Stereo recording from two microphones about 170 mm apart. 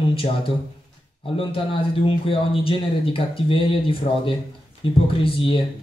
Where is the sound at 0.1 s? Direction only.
35° left (ahead or behind).